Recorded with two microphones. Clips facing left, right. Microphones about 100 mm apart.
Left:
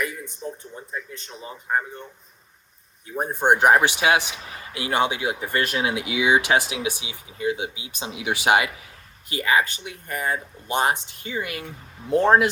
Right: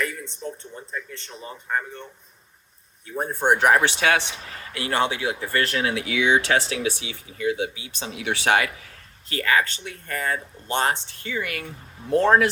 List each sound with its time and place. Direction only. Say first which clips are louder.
0.7 s speech: even; 15° left (ahead or behind)
3.1 s speech: left 1 dB; 20° left (ahead or behind)
11.6 s speech: even; 5° left (ahead or behind)
12.0 s speech: even; 15° left (ahead or behind)